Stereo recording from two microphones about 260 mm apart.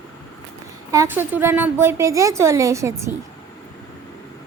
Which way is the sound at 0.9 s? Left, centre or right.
Centre.